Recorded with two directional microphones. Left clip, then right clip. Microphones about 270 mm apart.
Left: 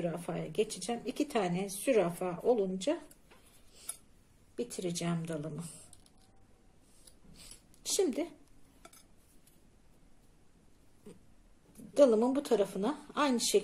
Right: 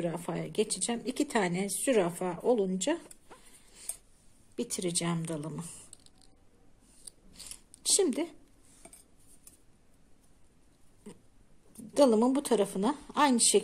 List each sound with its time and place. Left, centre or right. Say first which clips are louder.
0.0 s speech: right 2 dB; centre
4.6 s speech: right 3 dB; right
7.8 s speech: right 3 dB; centre
11.9 s speech: right 1 dB; right